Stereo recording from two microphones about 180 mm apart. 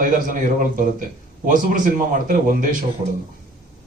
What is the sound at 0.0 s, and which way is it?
A man's voice, 50° right (ahead or behind).